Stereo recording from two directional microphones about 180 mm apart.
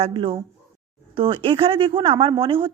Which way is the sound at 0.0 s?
30° right (ahead or behind).